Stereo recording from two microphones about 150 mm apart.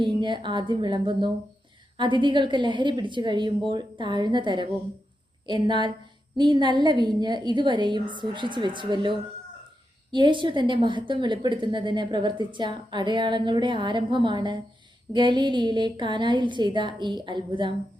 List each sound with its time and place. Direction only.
0.0 s a woman's voice: 30° right (ahead or behind)